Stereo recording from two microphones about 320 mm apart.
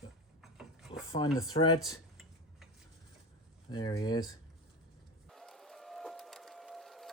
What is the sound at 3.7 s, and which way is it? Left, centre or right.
Speech, centre.